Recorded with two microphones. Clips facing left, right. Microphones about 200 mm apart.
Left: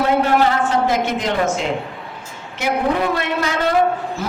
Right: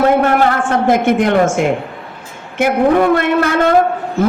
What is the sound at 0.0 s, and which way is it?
A woman's voice, 55° right (ahead or behind).